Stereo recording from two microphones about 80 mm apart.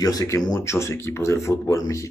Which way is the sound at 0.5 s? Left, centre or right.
Left.